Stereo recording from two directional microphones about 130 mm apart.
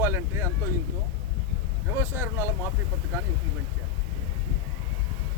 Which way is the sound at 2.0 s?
20° right (ahead or behind).